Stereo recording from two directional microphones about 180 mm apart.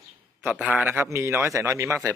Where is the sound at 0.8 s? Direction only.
10° right (ahead or behind).